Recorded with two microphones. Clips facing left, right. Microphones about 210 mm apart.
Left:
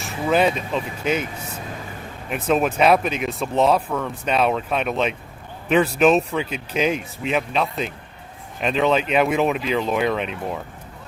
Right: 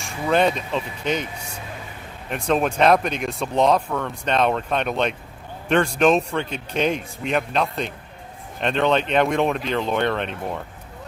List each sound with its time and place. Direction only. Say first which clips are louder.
0.0 s speech: left 1 dB; 5° left (ahead or behind)
2.3 s speech: left 1 dB; 5° left (ahead or behind)